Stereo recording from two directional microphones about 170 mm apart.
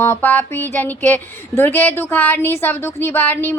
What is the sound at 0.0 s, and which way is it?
Speech, 10° left (ahead or behind).